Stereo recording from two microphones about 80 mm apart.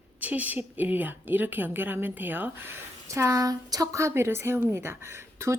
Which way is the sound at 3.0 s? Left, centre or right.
Right.